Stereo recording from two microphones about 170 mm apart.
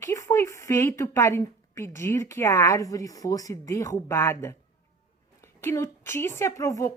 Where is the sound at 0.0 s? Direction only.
15° left (ahead or behind).